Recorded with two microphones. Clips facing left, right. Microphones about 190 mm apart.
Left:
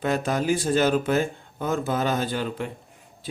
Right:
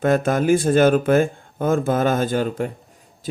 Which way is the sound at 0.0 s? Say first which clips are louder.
Right 6 dB; 50° right (ahead or behind).